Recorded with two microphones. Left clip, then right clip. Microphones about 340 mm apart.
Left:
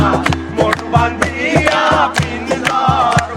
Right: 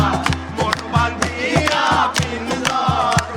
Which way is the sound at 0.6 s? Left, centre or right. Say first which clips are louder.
Left 5 dB; centre.